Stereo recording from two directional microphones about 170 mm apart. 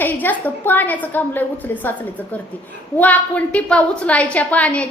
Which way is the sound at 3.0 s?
10° left (ahead or behind).